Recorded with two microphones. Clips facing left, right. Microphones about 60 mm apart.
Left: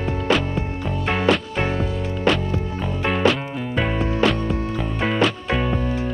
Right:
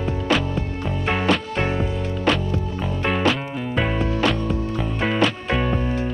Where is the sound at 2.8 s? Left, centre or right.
Centre.